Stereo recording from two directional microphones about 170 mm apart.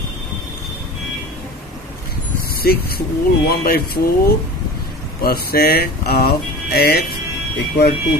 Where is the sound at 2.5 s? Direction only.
65° left (ahead or behind).